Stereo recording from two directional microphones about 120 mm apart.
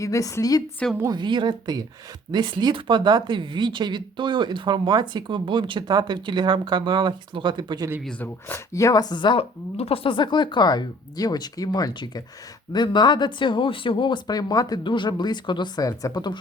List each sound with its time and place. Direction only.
0.0 s a woman's voice: 25° left (ahead or behind)
1.1 s speech: 40° right (ahead or behind)
8.2 s speech: 20° left (ahead or behind); by 16.4 s 35° left (ahead or behind)